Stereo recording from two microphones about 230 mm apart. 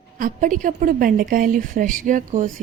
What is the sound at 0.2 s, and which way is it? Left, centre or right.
A woman's voice, right.